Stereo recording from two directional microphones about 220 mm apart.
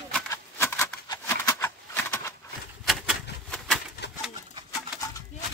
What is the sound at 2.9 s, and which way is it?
Typewriter, centre (ahead or behind).